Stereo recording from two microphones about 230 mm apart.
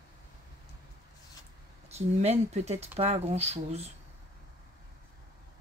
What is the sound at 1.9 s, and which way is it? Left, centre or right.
A woman's voice, right.